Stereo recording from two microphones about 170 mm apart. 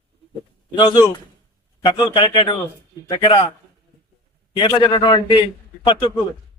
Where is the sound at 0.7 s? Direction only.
25° left (ahead or behind).